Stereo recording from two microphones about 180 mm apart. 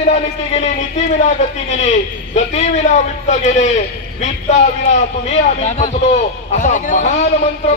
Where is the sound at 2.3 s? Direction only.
40° left (ahead or behind).